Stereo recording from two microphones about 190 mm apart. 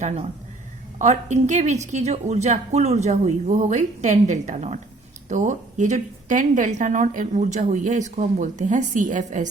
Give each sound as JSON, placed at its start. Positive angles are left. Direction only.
{"t": 0.9, "sound": "speech", "side_deg": -35}